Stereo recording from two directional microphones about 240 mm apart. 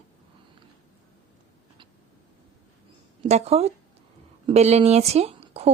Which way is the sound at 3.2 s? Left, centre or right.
Right.